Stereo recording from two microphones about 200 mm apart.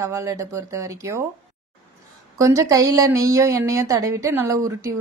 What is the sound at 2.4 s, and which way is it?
Speech, 15° right (ahead or behind).